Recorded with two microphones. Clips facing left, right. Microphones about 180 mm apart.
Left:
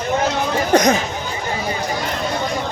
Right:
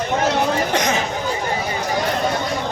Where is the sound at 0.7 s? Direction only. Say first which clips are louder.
Left 6 dB; 40° left (ahead or behind).